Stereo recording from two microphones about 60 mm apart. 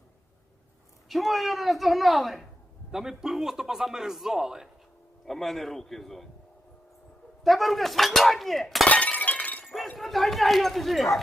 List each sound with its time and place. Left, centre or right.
1.0 s a man's voice: centre
5.2 s speech: centre
7.4 s speech: centre
8.9 s breaking: left
9.6 s chink: centre
10.0 s speech: centre